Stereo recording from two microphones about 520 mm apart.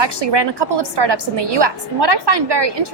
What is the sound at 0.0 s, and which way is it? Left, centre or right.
A woman's voice, right.